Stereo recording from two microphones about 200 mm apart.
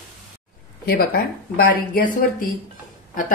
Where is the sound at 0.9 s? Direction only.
50° left (ahead or behind).